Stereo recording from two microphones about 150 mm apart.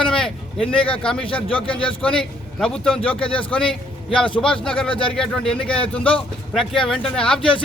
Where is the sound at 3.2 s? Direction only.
35° left (ahead or behind).